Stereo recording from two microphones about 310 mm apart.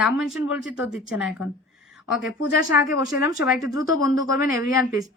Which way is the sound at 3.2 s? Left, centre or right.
Centre.